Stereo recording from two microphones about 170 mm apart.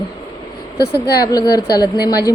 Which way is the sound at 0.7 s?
20° left (ahead or behind).